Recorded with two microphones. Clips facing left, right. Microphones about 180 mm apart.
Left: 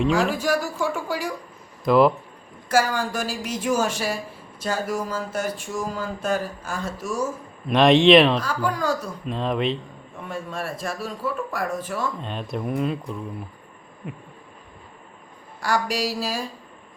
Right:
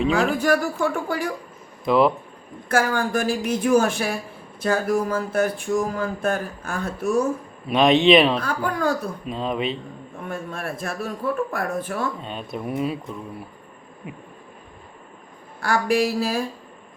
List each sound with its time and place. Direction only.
0.1 s speech: 55° right (ahead or behind)
1.8 s speech: centre (ahead or behind)
2.6 s speech: 55° right (ahead or behind)
7.7 s speech: centre (ahead or behind)
8.4 s speech: 55° right (ahead or behind)
9.2 s speech: centre (ahead or behind)
10.2 s speech: 55° right (ahead or behind)
12.2 s speech: centre (ahead or behind)
15.6 s speech: 55° right (ahead or behind)